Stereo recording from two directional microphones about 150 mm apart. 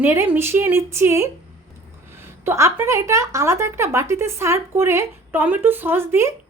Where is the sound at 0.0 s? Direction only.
15° right (ahead or behind).